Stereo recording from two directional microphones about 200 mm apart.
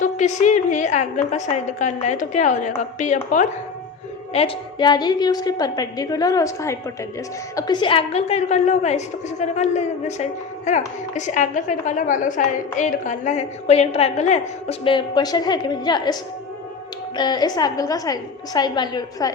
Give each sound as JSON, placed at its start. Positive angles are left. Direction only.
{"t": 0.0, "sound": "a woman's voice", "side_deg": 35}
{"t": 4.4, "sound": "a woman's voice", "side_deg": 25}
{"t": 17.2, "sound": "a woman's voice", "side_deg": 20}